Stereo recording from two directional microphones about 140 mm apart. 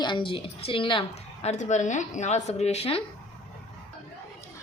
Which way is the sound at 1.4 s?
55° left (ahead or behind).